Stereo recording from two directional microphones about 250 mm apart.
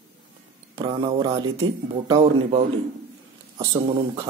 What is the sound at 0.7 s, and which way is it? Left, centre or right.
Speech, centre.